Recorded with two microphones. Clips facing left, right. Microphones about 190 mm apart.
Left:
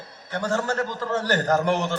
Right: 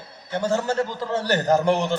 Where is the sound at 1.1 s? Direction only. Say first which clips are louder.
Right 2 dB; 10° right (ahead or behind).